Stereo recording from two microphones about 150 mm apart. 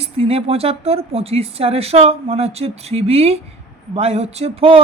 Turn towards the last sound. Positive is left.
turn(degrees=-40)  # may be behind; listen again after turning